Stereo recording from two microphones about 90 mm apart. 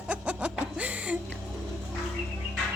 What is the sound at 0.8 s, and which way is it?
Music, 15° right (ahead or behind).